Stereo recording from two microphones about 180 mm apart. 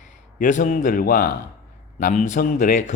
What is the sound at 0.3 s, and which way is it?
Speech, 45° left (ahead or behind).